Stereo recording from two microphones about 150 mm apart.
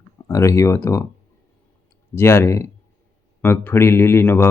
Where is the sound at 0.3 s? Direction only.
20° left (ahead or behind).